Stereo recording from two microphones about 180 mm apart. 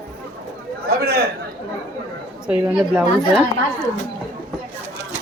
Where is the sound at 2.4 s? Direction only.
5° right (ahead or behind).